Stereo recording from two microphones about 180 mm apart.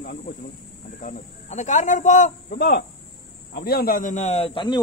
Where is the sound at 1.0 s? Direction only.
40° left (ahead or behind).